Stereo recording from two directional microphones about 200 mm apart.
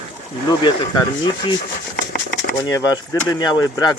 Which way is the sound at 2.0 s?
55° left (ahead or behind).